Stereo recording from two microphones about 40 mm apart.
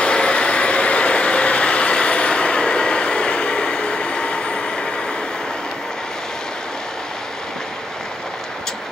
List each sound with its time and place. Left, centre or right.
0.0 s vehicle: left